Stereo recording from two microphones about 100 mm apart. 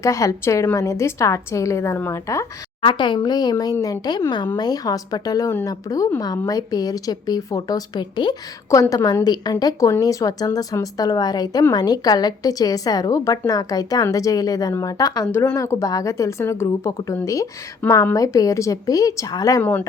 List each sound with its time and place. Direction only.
0.0 s a woman's voice: 35° left (ahead or behind)
2.8 s a woman's voice: 50° left (ahead or behind)
8.7 s speech: 35° left (ahead or behind)
15.3 s speech: 25° left (ahead or behind)